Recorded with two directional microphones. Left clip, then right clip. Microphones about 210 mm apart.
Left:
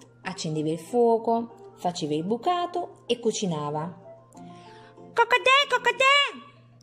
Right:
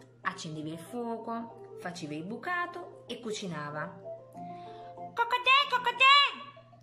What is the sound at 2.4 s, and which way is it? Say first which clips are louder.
A woman's voice: left 3 dB; 25° left (ahead or behind).